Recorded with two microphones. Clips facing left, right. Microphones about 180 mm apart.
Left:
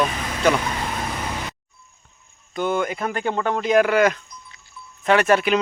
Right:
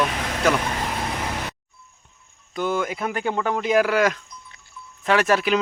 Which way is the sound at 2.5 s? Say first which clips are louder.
Left 2 dB; centre (ahead or behind).